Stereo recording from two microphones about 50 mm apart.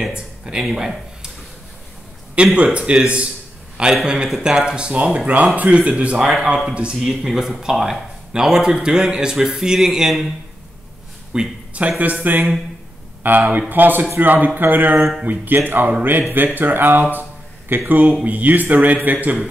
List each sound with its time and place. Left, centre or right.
0.1 s speech: centre
2.3 s speech: right
3.9 s a man's voice: centre
4.7 s speech: right
6.1 s a man's voice: centre
6.7 s speech: right
7.0 s a man's voice: centre
11.3 s speech: right
17.1 s a sound: right
18.2 s speech: right